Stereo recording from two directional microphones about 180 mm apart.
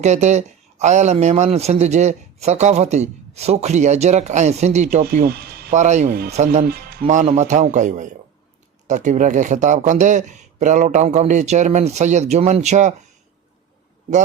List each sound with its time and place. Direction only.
0.0 s speech: 40° right (ahead or behind)
5.0 s speech: 60° right (ahead or behind)
5.7 s speech: 40° right (ahead or behind)
6.7 s speech: 55° right (ahead or behind); by 12.9 s 40° right (ahead or behind)